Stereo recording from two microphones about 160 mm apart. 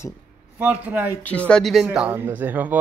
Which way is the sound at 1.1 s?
10° left (ahead or behind).